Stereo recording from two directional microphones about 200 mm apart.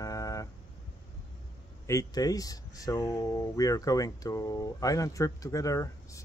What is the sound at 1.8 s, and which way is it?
Speech, 15° left (ahead or behind).